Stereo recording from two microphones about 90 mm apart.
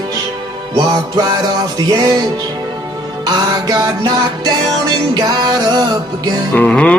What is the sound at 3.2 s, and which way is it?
Music, 45° right (ahead or behind).